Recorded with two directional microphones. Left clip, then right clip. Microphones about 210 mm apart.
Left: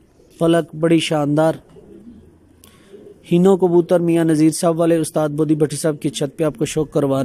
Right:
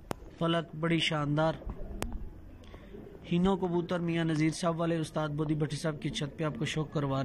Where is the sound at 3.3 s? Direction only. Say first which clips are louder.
Left 17 dB; 55° left (ahead or behind).